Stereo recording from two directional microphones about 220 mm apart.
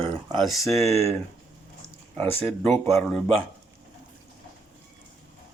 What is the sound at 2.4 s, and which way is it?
Speech, centre (ahead or behind).